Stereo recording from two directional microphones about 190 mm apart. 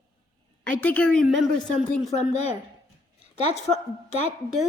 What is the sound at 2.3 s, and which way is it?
A woman's voice, 35° left (ahead or behind).